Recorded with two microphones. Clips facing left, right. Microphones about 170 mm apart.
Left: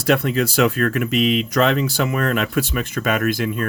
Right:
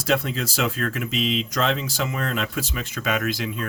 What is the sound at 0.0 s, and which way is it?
Speech, 60° left (ahead or behind).